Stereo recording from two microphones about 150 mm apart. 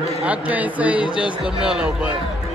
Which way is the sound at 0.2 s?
10° right (ahead or behind).